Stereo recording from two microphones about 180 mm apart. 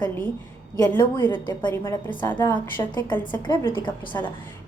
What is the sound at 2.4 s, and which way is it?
A woman's voice, 25° left (ahead or behind).